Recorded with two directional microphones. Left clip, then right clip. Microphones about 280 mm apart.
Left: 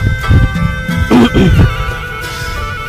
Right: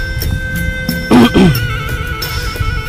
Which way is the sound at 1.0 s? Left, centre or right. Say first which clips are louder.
Right 1 dB; centre.